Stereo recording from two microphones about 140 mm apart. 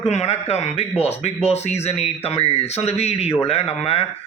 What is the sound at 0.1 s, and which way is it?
A man's voice, 50° left (ahead or behind).